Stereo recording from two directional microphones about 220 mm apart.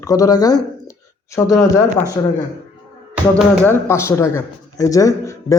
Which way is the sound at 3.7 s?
10° left (ahead or behind).